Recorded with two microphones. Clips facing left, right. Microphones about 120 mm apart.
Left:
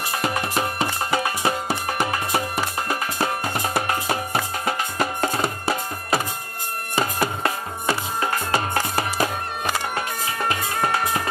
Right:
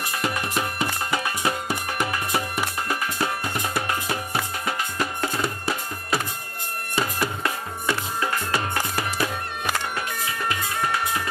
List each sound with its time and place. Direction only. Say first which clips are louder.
0.2 s music: left 2 dB; 30° left (ahead or behind)
10.5 s music: left 3 dB; 45° left (ahead or behind)